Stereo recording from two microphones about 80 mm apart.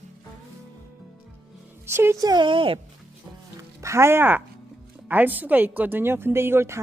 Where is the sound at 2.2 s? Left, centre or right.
Right.